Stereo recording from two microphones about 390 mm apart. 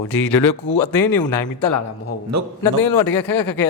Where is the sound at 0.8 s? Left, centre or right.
Left.